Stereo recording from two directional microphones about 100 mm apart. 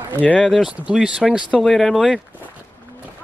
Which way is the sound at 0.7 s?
10° right (ahead or behind).